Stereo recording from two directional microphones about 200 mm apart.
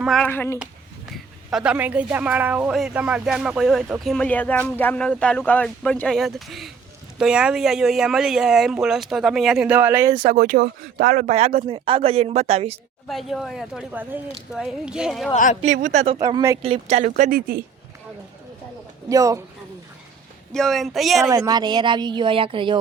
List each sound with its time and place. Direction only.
0.0 s speech: centre (ahead or behind)
0.3 s speech: 10° left (ahead or behind)
1.1 s speech: centre (ahead or behind)
10.2 s speech: 40° right (ahead or behind)
13.1 s speech: centre (ahead or behind)
15.6 s speech: 35° right (ahead or behind)
16.1 s speech: 15° right (ahead or behind)
16.6 s speech: 30° right (ahead or behind)
19.0 s speech: 15° right (ahead or behind)
20.5 s speech: centre (ahead or behind)
21.2 s speech: 15° right (ahead or behind)